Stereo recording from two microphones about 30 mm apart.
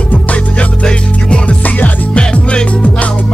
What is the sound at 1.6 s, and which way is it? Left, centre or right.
Music, left.